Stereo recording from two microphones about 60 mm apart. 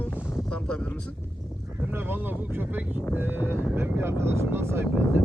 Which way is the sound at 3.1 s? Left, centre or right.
Right.